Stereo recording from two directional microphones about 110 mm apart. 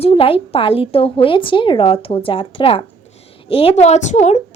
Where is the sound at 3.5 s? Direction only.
70° left (ahead or behind); by 4.4 s 90° left.